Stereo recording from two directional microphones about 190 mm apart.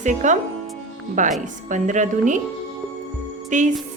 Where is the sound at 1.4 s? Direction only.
40° right (ahead or behind).